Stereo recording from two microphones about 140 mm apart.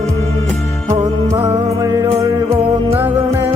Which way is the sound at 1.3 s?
25° right (ahead or behind).